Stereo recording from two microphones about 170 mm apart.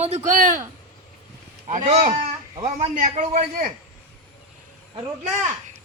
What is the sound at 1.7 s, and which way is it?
Speech, 45° right (ahead or behind).